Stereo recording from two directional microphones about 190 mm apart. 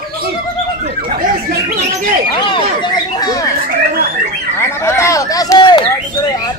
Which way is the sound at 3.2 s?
20° left (ahead or behind).